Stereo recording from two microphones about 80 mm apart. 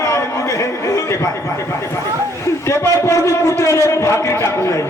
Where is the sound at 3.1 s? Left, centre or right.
Left.